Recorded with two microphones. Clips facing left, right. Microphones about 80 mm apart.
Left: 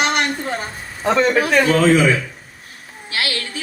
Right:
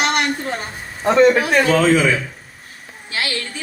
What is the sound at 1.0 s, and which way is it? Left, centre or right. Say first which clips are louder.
Speech: right 3 dB; right.